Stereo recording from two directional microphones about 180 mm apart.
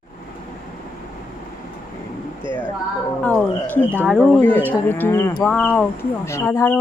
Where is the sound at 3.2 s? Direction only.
10° left (ahead or behind).